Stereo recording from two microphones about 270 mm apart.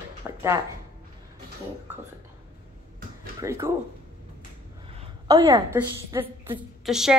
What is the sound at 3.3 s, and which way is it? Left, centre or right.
Speech, centre.